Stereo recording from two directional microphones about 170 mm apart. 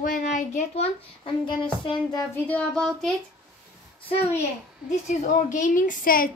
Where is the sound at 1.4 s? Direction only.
30° left (ahead or behind).